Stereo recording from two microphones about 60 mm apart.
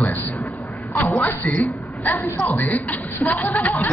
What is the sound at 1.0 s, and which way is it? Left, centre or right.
A man's voice, left.